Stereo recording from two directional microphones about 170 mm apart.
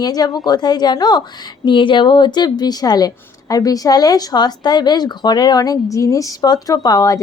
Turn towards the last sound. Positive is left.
turn(degrees=20)  # may be behind; listen again after turning